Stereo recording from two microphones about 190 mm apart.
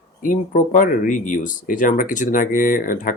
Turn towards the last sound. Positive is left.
turn(degrees=45)  # may be behind; listen again after turning